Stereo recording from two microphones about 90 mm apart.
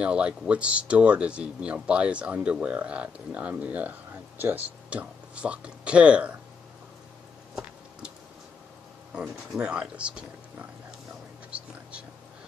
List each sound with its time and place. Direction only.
0.0 s speech: 10° right (ahead or behind)
9.1 s speech: 10° right (ahead or behind)
11.5 s whispering: 15° right (ahead or behind)